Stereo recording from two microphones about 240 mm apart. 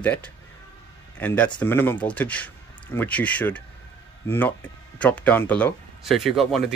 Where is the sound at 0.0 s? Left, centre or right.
Centre.